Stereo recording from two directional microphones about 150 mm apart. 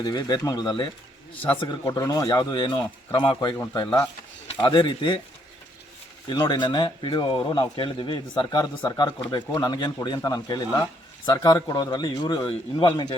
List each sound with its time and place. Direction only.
0.0 s speech: 25° left (ahead or behind)
1.8 s speech: 25° left (ahead or behind)
3.6 s speech: 15° left (ahead or behind); by 5.2 s 30° left (ahead or behind)
6.2 s speech: 30° left (ahead or behind)